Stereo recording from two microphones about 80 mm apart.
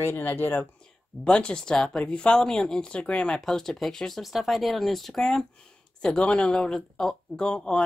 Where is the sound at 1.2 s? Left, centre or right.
Centre.